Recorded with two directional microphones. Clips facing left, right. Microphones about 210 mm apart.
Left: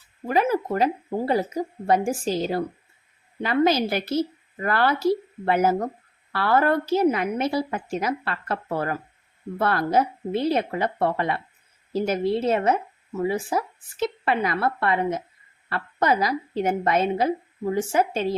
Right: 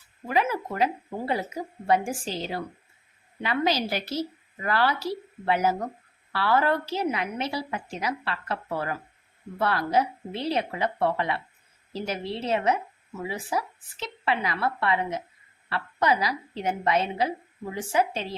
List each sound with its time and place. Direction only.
0.3 s a woman's voice: 40° left (ahead or behind)